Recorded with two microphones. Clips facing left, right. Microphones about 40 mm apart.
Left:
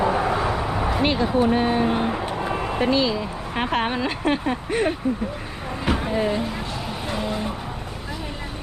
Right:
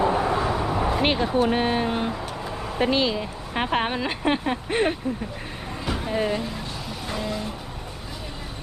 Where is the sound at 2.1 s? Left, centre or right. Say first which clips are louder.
Left 6 dB; left.